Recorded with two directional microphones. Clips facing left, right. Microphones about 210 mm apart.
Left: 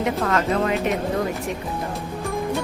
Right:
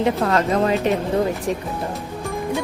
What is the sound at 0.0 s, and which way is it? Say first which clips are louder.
Speech: right 3 dB; 35° right (ahead or behind).